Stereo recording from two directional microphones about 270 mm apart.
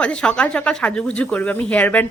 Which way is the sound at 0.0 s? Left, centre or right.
Centre.